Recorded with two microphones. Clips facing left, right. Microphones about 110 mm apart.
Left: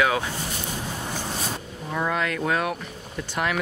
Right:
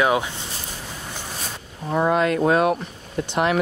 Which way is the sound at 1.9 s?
25° right (ahead or behind).